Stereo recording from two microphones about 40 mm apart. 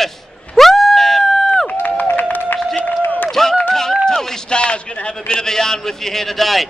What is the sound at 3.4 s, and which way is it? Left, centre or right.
A man's voice, centre.